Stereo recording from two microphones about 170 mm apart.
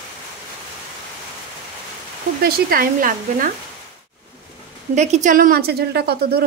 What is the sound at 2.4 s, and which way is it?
Speech, 60° right (ahead or behind).